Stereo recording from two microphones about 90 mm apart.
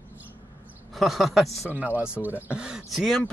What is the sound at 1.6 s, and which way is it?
Speech, 20° right (ahead or behind).